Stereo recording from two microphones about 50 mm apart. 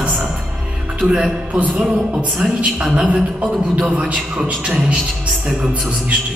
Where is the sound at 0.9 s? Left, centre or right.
Right.